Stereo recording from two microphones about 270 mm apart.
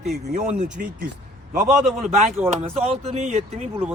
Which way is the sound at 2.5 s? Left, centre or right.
Right.